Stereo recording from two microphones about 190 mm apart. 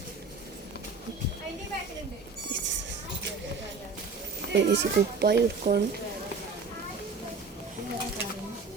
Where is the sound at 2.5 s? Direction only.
70° right (ahead or behind).